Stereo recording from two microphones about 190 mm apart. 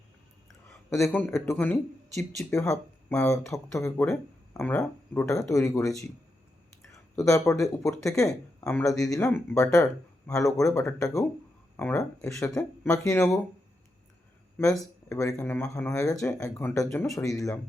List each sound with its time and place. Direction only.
0.9 s speech: 15° left (ahead or behind)
8.3 s speech: 5° left (ahead or behind)
8.8 s speech: 20° left (ahead or behind)
15.1 s speech: 15° left (ahead or behind)